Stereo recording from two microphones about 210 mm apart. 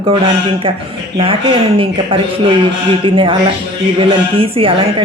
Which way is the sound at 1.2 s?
25° right (ahead or behind).